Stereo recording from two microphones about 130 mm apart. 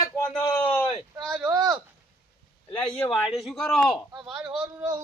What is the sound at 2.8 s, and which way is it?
Speech, 5° left (ahead or behind).